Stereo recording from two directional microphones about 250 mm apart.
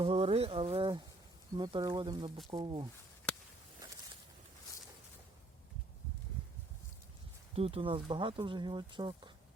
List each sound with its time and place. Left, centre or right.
0.0 s speech: right
7.5 s speech: right